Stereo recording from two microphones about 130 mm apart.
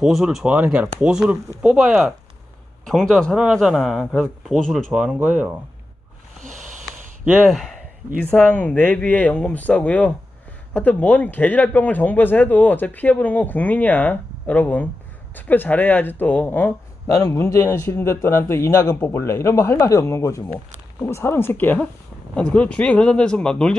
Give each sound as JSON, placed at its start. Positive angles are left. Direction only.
{"t": 0.0, "sound": "speech", "side_deg": -5}
{"t": 4.0, "sound": "speech", "side_deg": 10}
{"t": 4.9, "sound": "speech", "side_deg": -10}
{"t": 7.4, "sound": "speech", "side_deg": 0}
{"t": 8.2, "sound": "a man's voice", "side_deg": 10}
{"t": 17.1, "sound": "a man's voice", "side_deg": 25}